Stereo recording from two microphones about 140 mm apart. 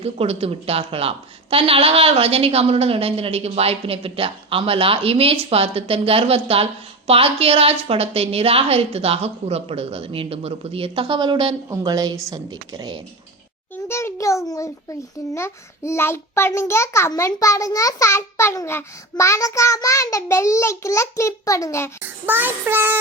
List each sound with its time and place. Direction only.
0.0 s a woman's voice: 45° right (ahead or behind); by 13.0 s 30° right (ahead or behind)
13.8 s a child's voice: 20° left (ahead or behind)
22.0 s child singing: 15° right (ahead or behind)